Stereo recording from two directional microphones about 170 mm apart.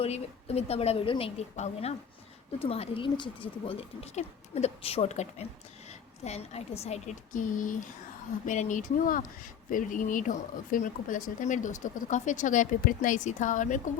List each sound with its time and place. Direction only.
0.0 s speech: 35° left (ahead or behind)